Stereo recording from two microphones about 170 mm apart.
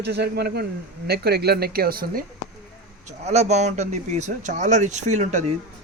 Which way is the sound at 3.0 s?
40° right (ahead or behind).